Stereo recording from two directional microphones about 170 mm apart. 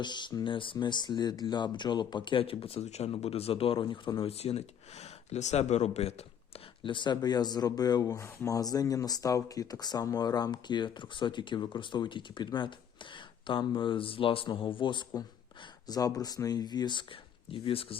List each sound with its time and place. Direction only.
0.0 s speech: 25° left (ahead or behind)
6.8 s speech: 30° left (ahead or behind)